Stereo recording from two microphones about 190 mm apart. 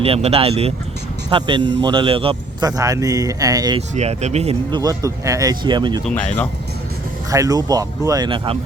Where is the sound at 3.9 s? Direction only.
35° right (ahead or behind).